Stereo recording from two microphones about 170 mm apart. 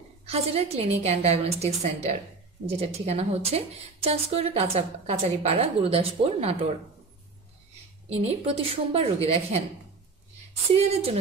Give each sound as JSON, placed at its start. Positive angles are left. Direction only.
{"t": 0.3, "sound": "speech", "side_deg": -35}
{"t": 8.2, "sound": "speech", "side_deg": -35}
{"t": 10.7, "sound": "speech", "side_deg": -35}